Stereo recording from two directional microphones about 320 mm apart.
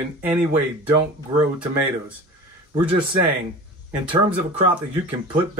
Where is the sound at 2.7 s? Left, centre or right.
Centre.